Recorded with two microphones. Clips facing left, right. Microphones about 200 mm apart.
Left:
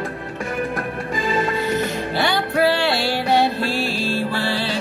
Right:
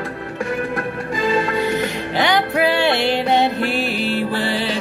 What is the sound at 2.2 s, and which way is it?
Music, 20° right (ahead or behind).